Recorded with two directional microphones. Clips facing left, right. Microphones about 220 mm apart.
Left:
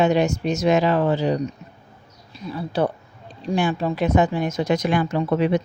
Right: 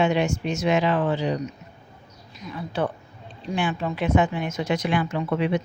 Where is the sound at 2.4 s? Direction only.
35° left (ahead or behind).